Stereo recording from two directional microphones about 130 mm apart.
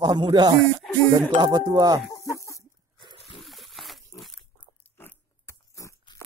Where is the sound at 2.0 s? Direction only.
25° left (ahead or behind).